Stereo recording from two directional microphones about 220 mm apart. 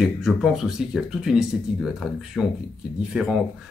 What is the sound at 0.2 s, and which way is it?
Speech, centre (ahead or behind).